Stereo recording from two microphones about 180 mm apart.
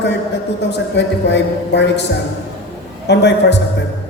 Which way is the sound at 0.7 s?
75° left (ahead or behind).